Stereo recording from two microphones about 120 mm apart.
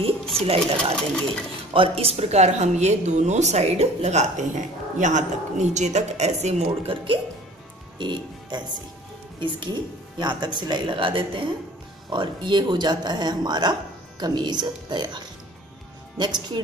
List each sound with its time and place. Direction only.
0.4 s a woman's voice: 55° right (ahead or behind)
8.0 s speech: 40° right (ahead or behind)